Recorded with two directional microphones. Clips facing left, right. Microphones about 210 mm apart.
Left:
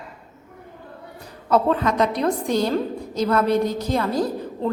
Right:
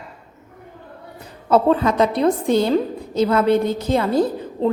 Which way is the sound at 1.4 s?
30° right (ahead or behind).